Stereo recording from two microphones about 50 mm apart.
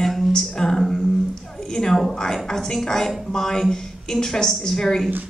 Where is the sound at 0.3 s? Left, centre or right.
Centre.